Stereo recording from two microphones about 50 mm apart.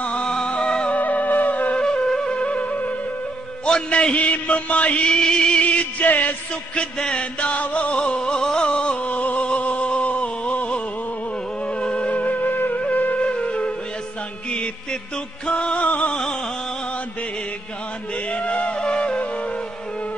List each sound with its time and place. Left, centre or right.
0.0 s music: left
0.9 s music: left
1.8 s music: centre
5.6 s music: left
6.8 s music: centre
11.8 s music: left
13.3 s music: left
14.5 s mantra: left
15.4 s music: left
18.3 s music: left